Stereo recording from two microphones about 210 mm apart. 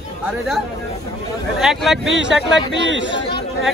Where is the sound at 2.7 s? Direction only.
60° right (ahead or behind).